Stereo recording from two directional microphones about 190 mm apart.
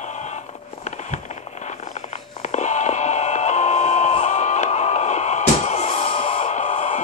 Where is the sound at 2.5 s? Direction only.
40° left (ahead or behind).